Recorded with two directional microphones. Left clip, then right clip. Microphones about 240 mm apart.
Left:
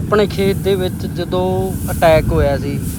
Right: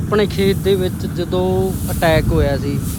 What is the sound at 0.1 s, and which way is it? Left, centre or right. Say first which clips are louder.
Speech: left 2 dB; centre.